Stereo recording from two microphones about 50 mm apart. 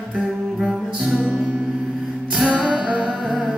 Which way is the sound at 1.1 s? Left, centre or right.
Right.